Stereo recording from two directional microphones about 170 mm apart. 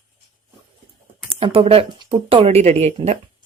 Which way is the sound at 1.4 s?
30° right (ahead or behind).